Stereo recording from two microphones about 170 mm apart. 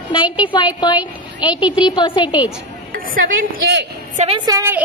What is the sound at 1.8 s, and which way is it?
Music, 25° left (ahead or behind).